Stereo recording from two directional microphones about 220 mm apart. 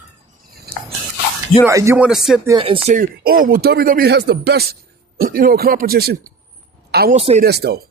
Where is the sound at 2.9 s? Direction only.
40° right (ahead or behind).